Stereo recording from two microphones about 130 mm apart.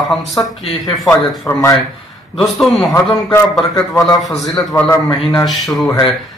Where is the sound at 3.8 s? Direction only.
25° left (ahead or behind).